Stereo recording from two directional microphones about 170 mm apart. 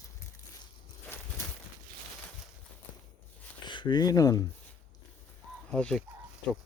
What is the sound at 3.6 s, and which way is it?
Speech, 25° left (ahead or behind).